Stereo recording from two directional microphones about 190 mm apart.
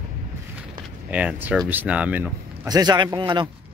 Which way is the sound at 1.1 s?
10° right (ahead or behind).